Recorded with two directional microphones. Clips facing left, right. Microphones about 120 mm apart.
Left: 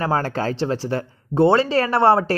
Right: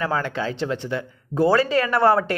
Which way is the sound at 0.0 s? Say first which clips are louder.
Left 3 dB; 40° left (ahead or behind).